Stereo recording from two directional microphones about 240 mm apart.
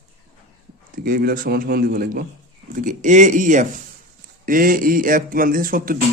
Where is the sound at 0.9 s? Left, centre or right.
Right.